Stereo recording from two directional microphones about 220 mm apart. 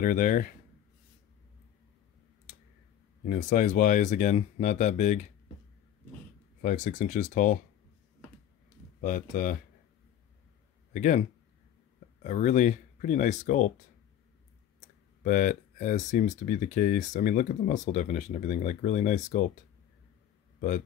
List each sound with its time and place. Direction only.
0.0 s speech: 35° left (ahead or behind)
3.3 s speech: 35° left (ahead or behind)
6.6 s speech: 35° left (ahead or behind)
9.0 s speech: 40° left (ahead or behind)
10.9 s a man's voice: 35° left (ahead or behind)
15.2 s speech: 35° left (ahead or behind)